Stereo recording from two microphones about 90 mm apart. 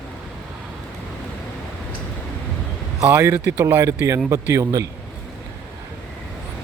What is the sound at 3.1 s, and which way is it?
A man's voice, 30° right (ahead or behind).